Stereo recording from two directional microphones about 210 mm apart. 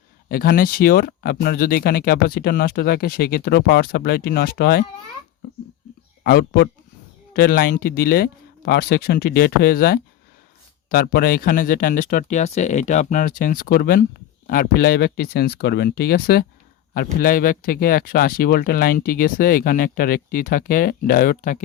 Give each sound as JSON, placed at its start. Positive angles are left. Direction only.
{"t": 0.3, "sound": "speech", "side_deg": 45}
{"t": 6.2, "sound": "speech", "side_deg": 45}